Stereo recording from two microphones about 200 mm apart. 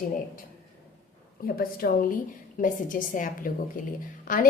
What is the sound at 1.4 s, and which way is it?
A woman's voice, 50° left (ahead or behind).